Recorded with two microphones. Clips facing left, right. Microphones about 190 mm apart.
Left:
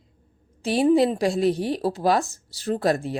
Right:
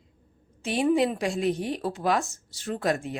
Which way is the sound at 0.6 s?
35° left (ahead or behind).